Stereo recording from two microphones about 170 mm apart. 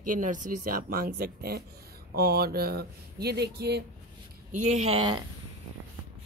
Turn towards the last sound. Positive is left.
turn(degrees=-30)  # may be behind; listen again after turning